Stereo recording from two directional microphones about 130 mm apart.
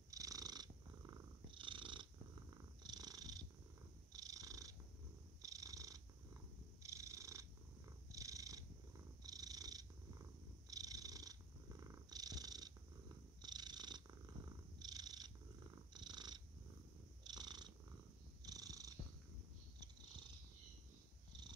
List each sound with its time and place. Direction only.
0.1 s purr: 25° right (ahead or behind)
1.5 s purr: 40° right (ahead or behind)